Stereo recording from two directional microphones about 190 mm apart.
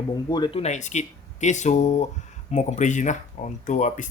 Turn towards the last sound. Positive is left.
turn(degrees=40)  # may be behind; listen again after turning